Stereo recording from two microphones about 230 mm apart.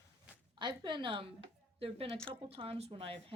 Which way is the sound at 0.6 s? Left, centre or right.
Centre.